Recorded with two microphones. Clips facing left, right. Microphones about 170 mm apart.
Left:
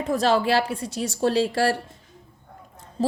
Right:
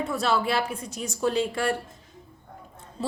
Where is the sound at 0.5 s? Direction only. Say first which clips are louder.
Left 5 dB; 35° left (ahead or behind).